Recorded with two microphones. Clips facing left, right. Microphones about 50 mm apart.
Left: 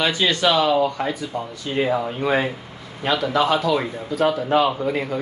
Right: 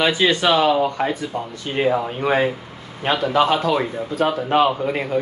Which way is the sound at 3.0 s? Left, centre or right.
Right.